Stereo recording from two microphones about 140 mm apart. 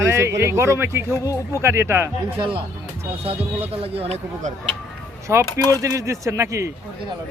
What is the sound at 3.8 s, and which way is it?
Speech, 45° right (ahead or behind).